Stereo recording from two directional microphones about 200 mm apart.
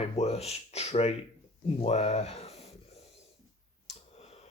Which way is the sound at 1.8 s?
30° left (ahead or behind).